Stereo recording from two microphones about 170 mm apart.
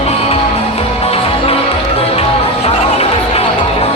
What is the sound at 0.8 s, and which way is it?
Music, 35° left (ahead or behind).